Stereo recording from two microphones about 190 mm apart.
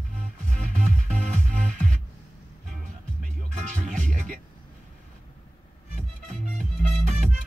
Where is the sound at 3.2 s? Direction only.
40° right (ahead or behind).